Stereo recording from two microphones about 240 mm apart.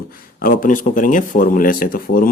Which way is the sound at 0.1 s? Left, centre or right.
Left.